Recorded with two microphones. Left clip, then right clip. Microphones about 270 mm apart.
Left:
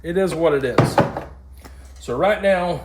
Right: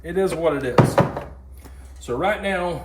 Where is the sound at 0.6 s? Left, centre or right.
Centre.